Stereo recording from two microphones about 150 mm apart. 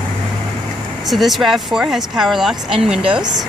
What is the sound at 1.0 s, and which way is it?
Speech, centre (ahead or behind).